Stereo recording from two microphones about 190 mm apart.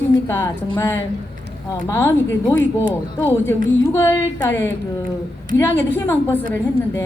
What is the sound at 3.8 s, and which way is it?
A woman's voice, 10° left (ahead or behind).